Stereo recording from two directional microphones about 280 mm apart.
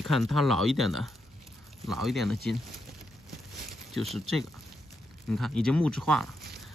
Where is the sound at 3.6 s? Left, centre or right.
Centre.